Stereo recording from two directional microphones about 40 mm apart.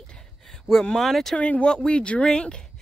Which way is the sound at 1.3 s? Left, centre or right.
Left.